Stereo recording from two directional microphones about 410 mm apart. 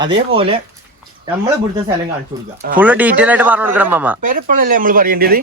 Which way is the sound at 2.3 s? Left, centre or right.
Centre.